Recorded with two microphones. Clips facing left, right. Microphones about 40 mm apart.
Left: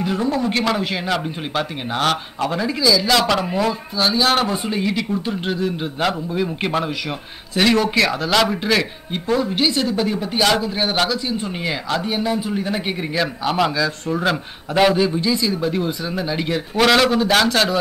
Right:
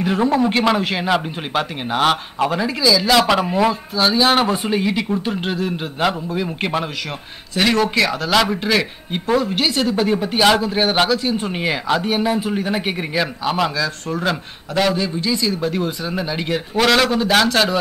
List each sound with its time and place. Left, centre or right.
0.0 s a man's voice: right
10.0 s speech: centre
14.7 s a man's voice: centre
15.4 s a man's voice: centre